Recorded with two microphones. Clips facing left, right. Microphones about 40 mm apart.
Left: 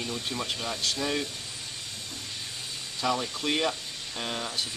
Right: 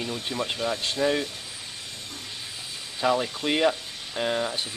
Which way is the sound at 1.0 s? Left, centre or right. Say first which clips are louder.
Right 8 dB; right.